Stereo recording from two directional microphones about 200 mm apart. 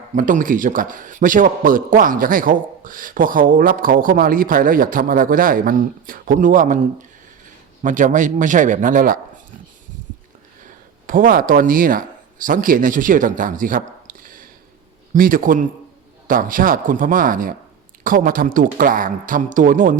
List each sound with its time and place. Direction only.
0.2 s a man's voice: 40° right (ahead or behind)
11.0 s a man's voice: 45° right (ahead or behind)